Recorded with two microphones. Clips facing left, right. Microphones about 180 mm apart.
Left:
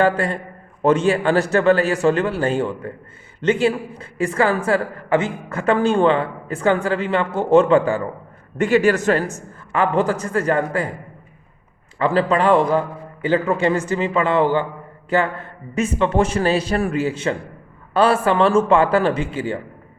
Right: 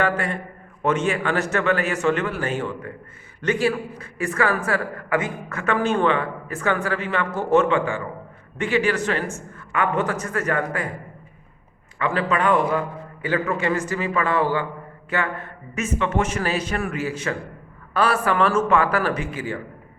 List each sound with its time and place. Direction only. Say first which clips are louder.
0.0 s a man's voice: left 5 dB; 35° left (ahead or behind)
9.7 s a man's voice: left 4 dB; 30° left (ahead or behind)
11.9 s a man's voice: left 5 dB; 30° left (ahead or behind)